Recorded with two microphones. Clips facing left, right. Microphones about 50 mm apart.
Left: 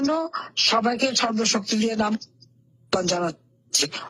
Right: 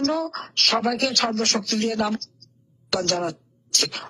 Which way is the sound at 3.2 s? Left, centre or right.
Centre.